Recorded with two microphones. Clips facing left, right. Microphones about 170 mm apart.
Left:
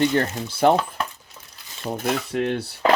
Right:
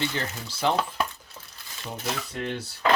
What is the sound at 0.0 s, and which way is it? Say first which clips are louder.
Speech: left 10 dB; 50° left (ahead or behind).